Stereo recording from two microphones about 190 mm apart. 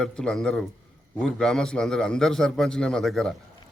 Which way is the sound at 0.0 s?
5° left (ahead or behind).